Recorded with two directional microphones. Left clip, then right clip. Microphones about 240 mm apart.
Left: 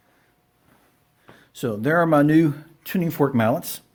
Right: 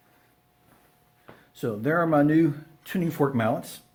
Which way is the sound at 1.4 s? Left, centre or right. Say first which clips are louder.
Left 4 dB; left.